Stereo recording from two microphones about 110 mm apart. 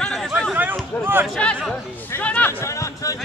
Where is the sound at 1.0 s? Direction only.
20° right (ahead or behind).